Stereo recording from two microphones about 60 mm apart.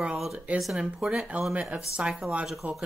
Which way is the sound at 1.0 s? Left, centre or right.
Centre.